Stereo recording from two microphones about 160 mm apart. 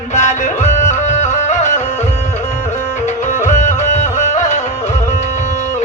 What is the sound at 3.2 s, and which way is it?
Music, 50° left (ahead or behind).